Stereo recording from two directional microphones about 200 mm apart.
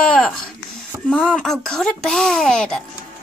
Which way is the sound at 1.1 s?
Centre (ahead or behind).